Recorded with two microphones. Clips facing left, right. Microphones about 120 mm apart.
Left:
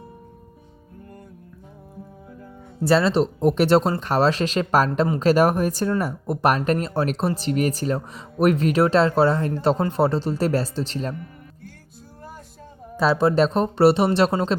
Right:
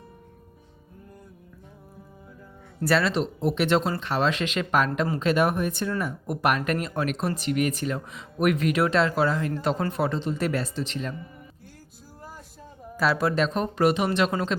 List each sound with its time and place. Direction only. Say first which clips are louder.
2.8 s speech: left 5 dB; 30° left (ahead or behind)
3.4 s speech: left 5 dB; 40° left (ahead or behind)
13.0 s speech: left 5 dB; 25° left (ahead or behind)